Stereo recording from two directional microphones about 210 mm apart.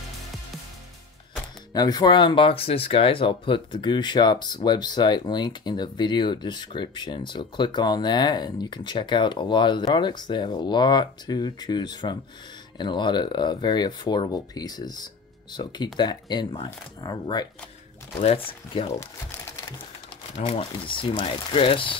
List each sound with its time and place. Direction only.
1.7 s speech: 20° left (ahead or behind)
18.5 s speech: 25° left (ahead or behind)
20.3 s speech: 30° left (ahead or behind)